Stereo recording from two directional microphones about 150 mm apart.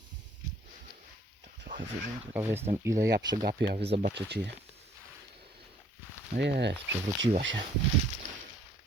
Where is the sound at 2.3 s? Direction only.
15° right (ahead or behind).